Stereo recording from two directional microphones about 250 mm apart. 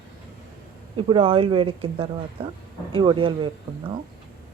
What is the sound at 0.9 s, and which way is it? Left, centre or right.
Speech, right.